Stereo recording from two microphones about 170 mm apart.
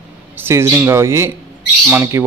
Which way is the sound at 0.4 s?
15° right (ahead or behind).